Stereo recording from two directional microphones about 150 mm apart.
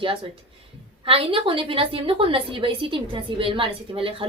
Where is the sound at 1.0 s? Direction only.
40° right (ahead or behind).